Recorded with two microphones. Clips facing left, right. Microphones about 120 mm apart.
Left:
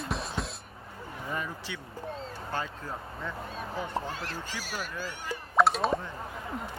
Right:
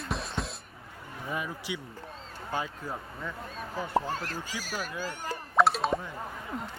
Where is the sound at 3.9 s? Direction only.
45° right (ahead or behind).